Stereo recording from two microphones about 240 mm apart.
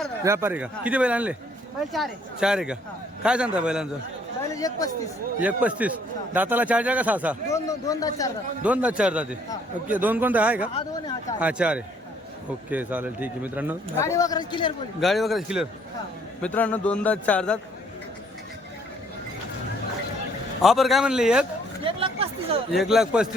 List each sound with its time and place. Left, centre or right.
0.3 s a man's voice: centre
4.5 s a man's voice: centre
5.4 s a man's voice: centre
7.5 s a man's voice: centre
8.6 s a man's voice: centre
14.0 s a man's voice: centre
15.0 s a man's voice: centre
20.6 s a man's voice: centre
21.8 s speech: right
22.7 s a man's voice: centre